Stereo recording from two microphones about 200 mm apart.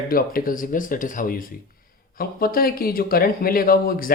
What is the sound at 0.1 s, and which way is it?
Speech, 45° left (ahead or behind).